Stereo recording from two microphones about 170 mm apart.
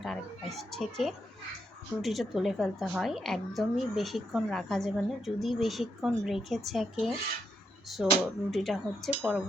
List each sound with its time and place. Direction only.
0.0 s a woman's voice: centre (ahead or behind)